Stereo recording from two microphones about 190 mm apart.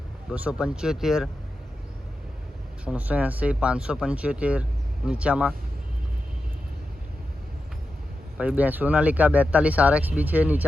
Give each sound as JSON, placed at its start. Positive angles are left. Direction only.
{"t": 0.3, "sound": "speech", "side_deg": -5}
{"t": 2.8, "sound": "speech", "side_deg": -5}
{"t": 8.4, "sound": "speech", "side_deg": -10}